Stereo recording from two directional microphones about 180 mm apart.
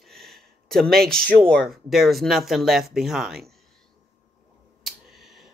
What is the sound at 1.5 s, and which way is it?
Speech, centre (ahead or behind).